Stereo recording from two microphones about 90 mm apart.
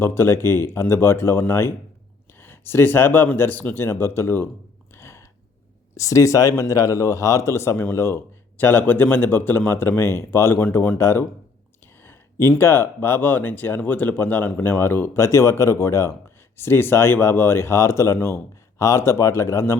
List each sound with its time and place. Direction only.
0.0 s speech: 25° left (ahead or behind)
4.9 s a sound: 30° left (ahead or behind)
6.0 s speech: 35° left (ahead or behind)